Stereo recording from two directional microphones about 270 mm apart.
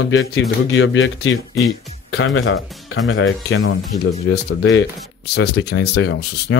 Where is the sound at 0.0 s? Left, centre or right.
Left.